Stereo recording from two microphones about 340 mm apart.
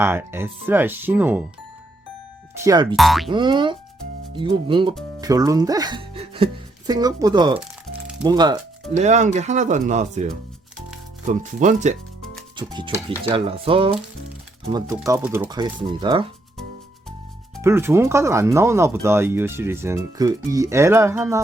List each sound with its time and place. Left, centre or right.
0.0 s speech: centre
2.6 s speech: centre
3.3 s speech: centre
17.6 s speech: centre